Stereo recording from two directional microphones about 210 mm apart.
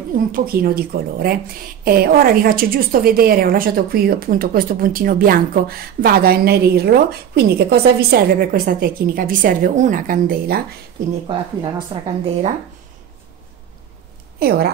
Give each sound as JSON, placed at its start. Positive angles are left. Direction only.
{"t": 0.3, "sound": "a woman's voice", "side_deg": -45}
{"t": 11.2, "sound": "speech", "side_deg": -25}
{"t": 14.4, "sound": "a woman's voice", "side_deg": -50}